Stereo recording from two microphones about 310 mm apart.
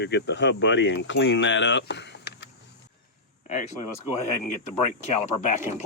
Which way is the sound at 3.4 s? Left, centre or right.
Left.